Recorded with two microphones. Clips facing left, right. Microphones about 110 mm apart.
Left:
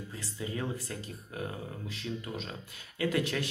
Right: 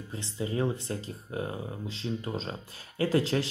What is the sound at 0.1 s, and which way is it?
Speech, 25° right (ahead or behind).